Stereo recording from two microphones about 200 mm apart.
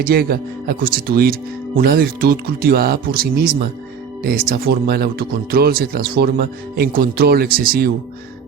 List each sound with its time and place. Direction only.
0.0 s speech: 50° right (ahead or behind)